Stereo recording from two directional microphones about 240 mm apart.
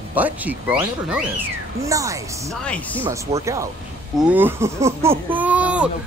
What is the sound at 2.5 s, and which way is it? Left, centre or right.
Speech, centre.